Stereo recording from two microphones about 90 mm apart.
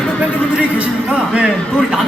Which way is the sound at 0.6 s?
15° right (ahead or behind).